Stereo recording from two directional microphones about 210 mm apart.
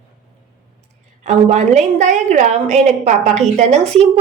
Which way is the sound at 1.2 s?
35° right (ahead or behind).